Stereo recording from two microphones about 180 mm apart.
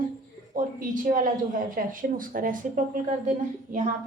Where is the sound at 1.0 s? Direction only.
50° right (ahead or behind).